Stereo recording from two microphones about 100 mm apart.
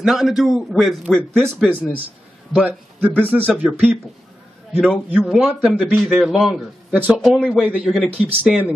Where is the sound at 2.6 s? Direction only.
15° right (ahead or behind).